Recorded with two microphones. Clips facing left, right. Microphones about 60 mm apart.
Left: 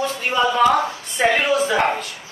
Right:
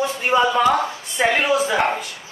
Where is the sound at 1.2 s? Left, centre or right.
Centre.